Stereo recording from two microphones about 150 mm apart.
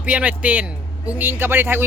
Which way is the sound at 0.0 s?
10° right (ahead or behind).